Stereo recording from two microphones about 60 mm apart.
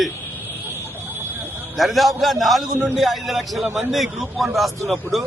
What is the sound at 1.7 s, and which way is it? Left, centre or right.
A man's voice, centre.